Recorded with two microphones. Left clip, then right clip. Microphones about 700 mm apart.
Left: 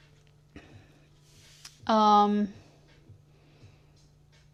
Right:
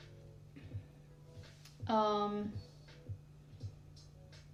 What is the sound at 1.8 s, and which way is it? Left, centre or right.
Speech, left.